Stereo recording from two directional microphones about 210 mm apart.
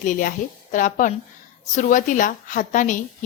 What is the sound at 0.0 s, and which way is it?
A woman's voice, 40° left (ahead or behind).